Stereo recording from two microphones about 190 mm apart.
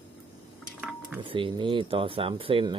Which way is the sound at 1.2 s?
25° right (ahead or behind).